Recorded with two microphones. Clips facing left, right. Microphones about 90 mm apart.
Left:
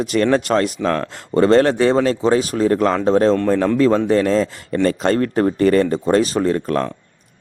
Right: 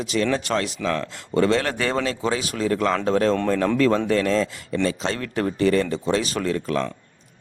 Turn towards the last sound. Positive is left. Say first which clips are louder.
# left 6 dB
turn(degrees=45)  # may be behind; listen again after turning